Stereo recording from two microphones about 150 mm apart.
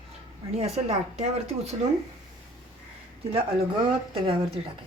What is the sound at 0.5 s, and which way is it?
Speech, 45° right (ahead or behind).